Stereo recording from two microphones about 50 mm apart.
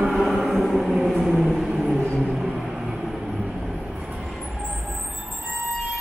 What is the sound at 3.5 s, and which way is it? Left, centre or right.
Vehicle, centre.